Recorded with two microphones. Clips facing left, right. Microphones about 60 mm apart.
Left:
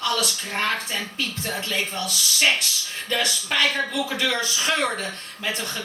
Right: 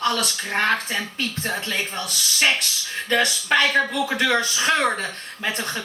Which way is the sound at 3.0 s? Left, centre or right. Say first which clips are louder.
Right 4 dB; right.